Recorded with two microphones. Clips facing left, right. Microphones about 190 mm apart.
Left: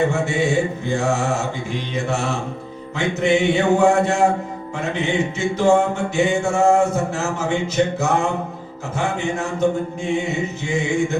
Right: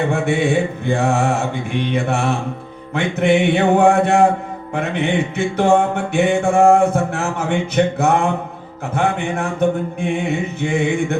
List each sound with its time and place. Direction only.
0.1 s mantra: 60° right (ahead or behind)